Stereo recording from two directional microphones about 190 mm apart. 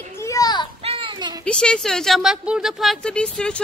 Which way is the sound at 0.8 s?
25° right (ahead or behind).